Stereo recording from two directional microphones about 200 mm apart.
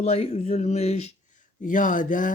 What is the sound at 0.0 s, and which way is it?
Speech, 30° left (ahead or behind).